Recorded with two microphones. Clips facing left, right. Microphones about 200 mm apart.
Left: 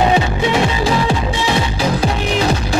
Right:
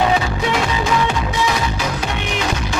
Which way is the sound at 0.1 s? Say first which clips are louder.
Left 3 dB; 30° left (ahead or behind).